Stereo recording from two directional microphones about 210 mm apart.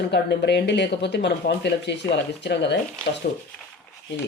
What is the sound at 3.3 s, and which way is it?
Speech, 45° left (ahead or behind).